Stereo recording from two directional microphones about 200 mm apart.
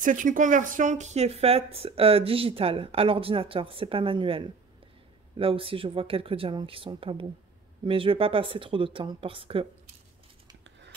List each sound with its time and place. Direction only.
0.0 s speech: 40° right (ahead or behind)